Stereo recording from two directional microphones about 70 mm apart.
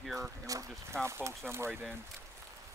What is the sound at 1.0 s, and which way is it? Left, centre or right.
Speech, right.